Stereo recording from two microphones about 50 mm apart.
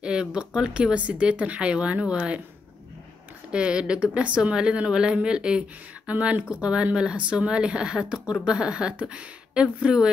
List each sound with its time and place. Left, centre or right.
0.0 s speech: centre
3.5 s speech: right